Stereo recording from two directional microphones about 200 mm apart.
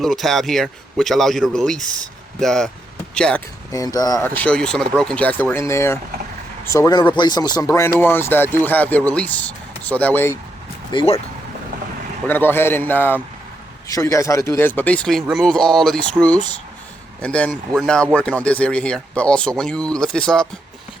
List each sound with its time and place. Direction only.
0.0 s speech: centre (ahead or behind)
3.7 s speech: 20° left (ahead or behind)
10.9 s speech: 30° left (ahead or behind)
12.3 s speech: 10° left (ahead or behind)
17.2 s speech: 5° left (ahead or behind)